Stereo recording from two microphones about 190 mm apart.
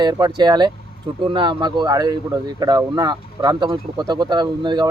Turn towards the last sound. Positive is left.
turn(degrees=-25)  # may be behind; listen again after turning